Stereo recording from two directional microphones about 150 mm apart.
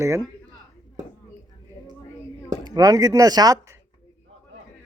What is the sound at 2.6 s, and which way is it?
Speech, 25° right (ahead or behind).